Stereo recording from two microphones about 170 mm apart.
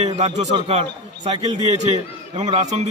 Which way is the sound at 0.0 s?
40° right (ahead or behind).